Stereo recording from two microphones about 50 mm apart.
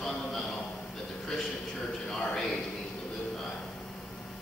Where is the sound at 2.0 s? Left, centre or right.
Centre.